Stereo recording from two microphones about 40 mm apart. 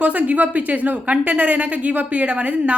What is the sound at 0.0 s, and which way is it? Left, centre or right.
A woman's voice, right.